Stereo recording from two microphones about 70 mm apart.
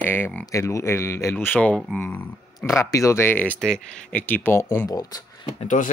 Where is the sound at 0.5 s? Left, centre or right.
Left.